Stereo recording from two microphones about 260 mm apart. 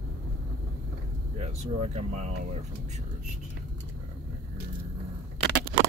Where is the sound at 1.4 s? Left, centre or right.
Right.